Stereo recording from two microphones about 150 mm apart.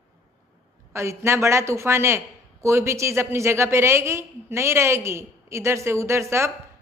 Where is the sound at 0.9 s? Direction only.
20° right (ahead or behind).